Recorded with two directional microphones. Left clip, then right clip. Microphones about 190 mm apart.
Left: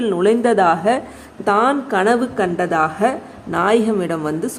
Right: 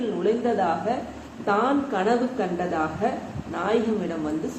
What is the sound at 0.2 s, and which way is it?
A woman's voice, 65° left (ahead or behind).